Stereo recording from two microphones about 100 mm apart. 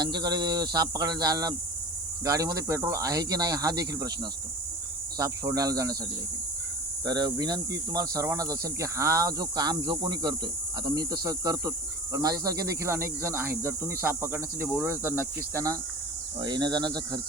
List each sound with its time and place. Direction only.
0.0 s speech: 45° right (ahead or behind)
7.0 s speech: 45° right (ahead or behind); by 15.3 s 25° right (ahead or behind)
15.4 s speech: 35° right (ahead or behind)
16.4 s speech: 45° right (ahead or behind)